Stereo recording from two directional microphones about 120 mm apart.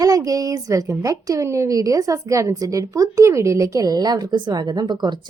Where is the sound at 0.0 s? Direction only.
30° right (ahead or behind).